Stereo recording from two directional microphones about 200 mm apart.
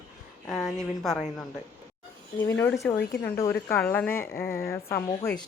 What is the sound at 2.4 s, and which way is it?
A woman's voice, 15° left (ahead or behind).